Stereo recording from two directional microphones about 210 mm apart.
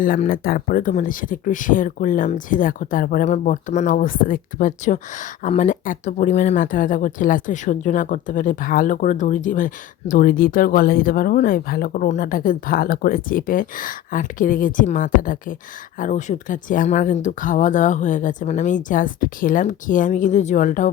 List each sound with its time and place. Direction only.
0.0 s speech: 40° left (ahead or behind)